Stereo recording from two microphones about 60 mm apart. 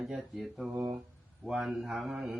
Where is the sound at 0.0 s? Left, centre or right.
Centre.